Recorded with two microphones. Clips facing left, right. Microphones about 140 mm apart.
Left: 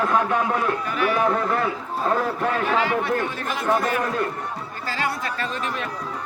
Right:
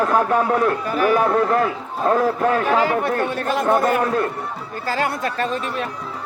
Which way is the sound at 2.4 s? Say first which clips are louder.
Right 5 dB; 45° right (ahead or behind).